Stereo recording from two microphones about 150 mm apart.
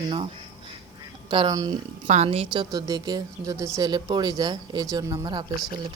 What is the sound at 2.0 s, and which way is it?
Speech, 45° right (ahead or behind).